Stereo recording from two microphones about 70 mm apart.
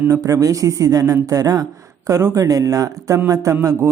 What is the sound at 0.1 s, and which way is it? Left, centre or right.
Speech, right.